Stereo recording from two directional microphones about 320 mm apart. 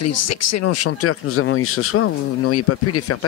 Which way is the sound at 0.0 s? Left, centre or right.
Left.